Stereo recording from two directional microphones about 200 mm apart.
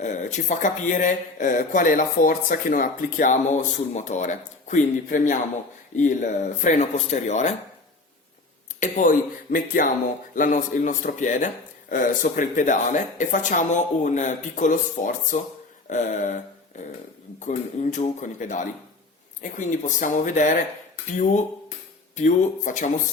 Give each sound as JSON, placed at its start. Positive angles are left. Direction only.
{"t": 0.0, "sound": "a man's voice", "side_deg": 40}
{"t": 8.8, "sound": "a man's voice", "side_deg": 40}
{"t": 15.9, "sound": "a sound", "side_deg": 40}
{"t": 17.4, "sound": "a man's voice", "side_deg": 40}
{"t": 22.1, "sound": "a man's voice", "side_deg": 40}